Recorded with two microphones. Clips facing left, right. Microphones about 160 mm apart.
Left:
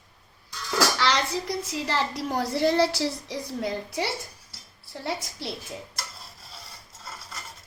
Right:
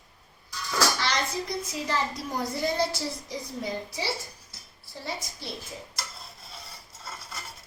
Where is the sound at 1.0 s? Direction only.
80° left.